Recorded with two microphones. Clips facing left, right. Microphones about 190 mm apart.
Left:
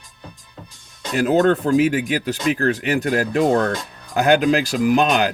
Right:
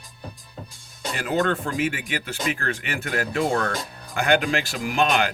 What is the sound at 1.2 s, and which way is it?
Speech, 40° left (ahead or behind).